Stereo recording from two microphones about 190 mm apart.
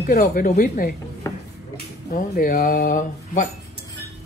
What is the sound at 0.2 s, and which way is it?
Speech, 40° left (ahead or behind).